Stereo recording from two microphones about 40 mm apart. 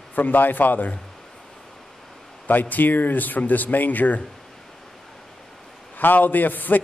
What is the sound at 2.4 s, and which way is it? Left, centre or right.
A man's voice, left.